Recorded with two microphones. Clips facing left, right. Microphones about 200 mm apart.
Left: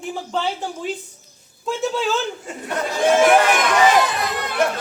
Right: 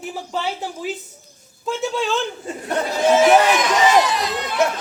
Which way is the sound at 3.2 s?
55° left (ahead or behind).